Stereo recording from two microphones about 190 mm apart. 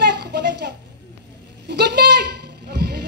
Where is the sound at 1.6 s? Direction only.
60° right (ahead or behind).